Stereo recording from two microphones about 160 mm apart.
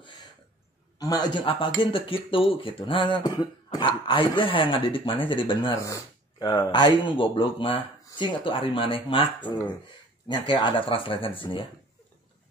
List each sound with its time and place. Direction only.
0.0 s a sound: 25° left (ahead or behind)
0.9 s speech: 25° left (ahead or behind)
5.8 s speech: 20° left (ahead or behind)